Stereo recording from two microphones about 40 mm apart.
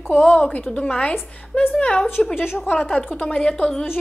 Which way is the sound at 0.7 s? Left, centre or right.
Left.